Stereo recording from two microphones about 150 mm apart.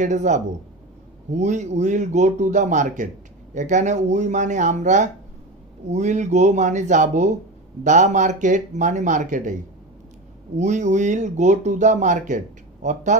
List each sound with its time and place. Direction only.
0.0 s speech: 55° right (ahead or behind)